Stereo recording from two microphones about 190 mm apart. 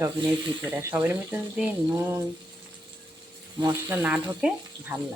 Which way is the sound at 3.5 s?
20° right (ahead or behind).